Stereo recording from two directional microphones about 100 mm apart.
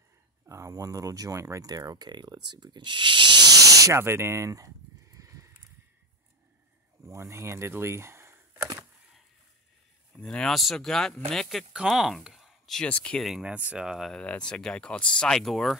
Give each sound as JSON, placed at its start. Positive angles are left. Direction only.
{"t": 0.5, "sound": "speech", "side_deg": -35}
{"t": 7.1, "sound": "speech", "side_deg": -30}
{"t": 10.1, "sound": "speech", "side_deg": 10}
{"t": 13.2, "sound": "speech", "side_deg": -5}
{"t": 14.2, "sound": "speech", "side_deg": 10}